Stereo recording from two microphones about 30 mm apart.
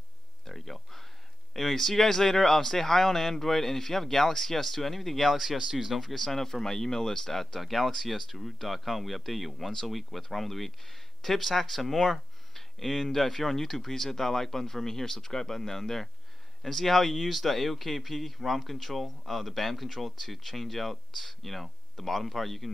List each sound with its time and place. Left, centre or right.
0.5 s a sound: centre
1.5 s speech: centre
5.6 s speech: centre
6.1 s speech: centre